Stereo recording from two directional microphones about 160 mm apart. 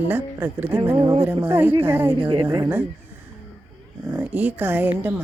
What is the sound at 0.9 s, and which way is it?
Speech, 25° right (ahead or behind).